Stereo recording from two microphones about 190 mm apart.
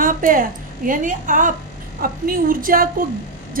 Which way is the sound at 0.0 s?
45° right (ahead or behind).